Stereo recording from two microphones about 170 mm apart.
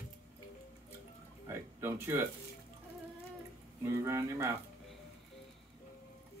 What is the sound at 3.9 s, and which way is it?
Speech, 15° right (ahead or behind).